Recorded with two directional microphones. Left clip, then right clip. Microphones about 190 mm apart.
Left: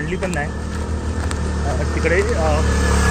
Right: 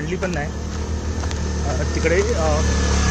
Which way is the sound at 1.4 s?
15° right (ahead or behind).